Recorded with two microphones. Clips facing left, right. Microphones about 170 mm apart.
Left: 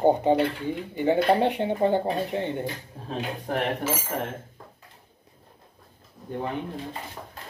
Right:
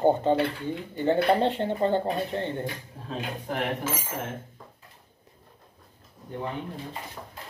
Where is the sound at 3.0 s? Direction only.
40° left (ahead or behind).